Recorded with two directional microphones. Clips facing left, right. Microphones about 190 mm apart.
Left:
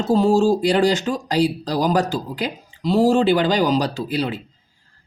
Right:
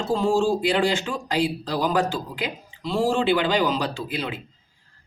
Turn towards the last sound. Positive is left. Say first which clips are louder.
# left 6 dB
turn(degrees=35)  # may be behind; listen again after turning